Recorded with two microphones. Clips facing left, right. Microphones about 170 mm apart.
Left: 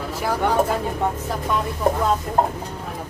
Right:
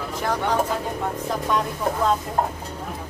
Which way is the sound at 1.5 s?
Centre (ahead or behind).